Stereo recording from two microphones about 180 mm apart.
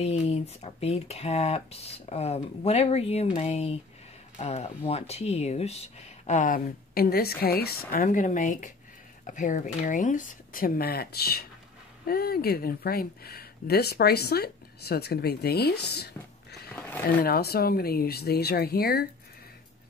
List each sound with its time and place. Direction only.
0.0 s speech: 35° left (ahead or behind); by 16.1 s 65° left (ahead or behind)
16.7 s a sound: 10° left (ahead or behind)
17.2 s speech: 60° left (ahead or behind)